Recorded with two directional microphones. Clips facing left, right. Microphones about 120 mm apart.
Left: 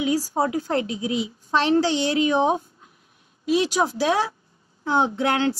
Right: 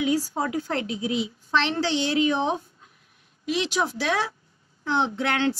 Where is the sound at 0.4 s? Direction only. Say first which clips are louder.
Left 4 dB; 35° left (ahead or behind).